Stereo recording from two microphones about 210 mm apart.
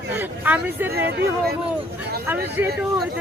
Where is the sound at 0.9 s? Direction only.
50° right (ahead or behind).